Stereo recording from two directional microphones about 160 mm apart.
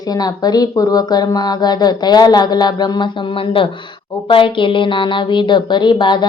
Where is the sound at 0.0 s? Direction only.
25° left (ahead or behind).